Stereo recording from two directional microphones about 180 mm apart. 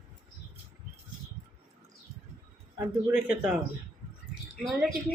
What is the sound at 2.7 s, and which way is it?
Speech, 10° right (ahead or behind).